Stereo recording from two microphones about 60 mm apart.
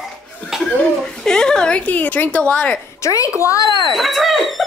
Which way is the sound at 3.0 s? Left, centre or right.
Left.